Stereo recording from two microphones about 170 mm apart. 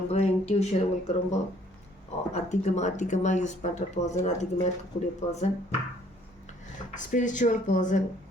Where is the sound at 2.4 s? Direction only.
40° left (ahead or behind).